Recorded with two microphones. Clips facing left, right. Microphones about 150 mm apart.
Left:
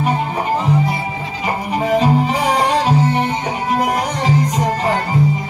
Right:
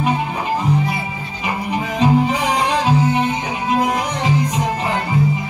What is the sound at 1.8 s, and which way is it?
Music, 30° left (ahead or behind).